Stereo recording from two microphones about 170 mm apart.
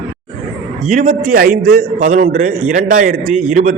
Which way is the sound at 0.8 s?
45° right (ahead or behind).